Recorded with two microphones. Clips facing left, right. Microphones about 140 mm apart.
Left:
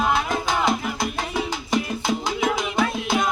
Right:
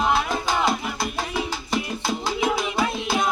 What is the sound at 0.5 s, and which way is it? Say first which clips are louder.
Salsa music: left 1 dB; centre (ahead or behind).